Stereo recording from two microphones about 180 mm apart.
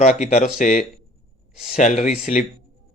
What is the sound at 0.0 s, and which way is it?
A man's voice, 40° left (ahead or behind).